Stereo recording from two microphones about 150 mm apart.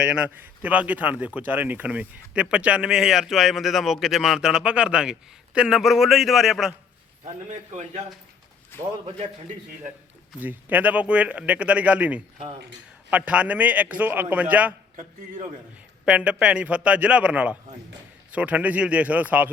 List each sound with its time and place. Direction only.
0.0 s speech: 10° right (ahead or behind)
7.5 s a man's voice: 50° right (ahead or behind)
8.7 s a man's voice: 15° left (ahead or behind)
10.4 s speech: 10° right (ahead or behind)
16.0 s speech: 5° right (ahead or behind)